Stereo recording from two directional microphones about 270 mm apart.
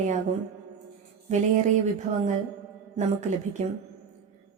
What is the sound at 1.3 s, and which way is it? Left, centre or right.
A woman's voice, right.